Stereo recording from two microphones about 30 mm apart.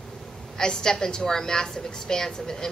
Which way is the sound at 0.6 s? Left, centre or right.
Left.